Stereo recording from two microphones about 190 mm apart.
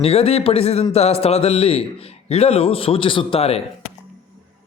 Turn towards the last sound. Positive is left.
turn(degrees=30)  # may be behind; listen again after turning